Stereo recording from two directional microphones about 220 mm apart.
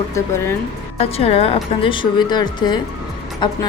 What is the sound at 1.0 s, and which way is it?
Speech, 25° left (ahead or behind).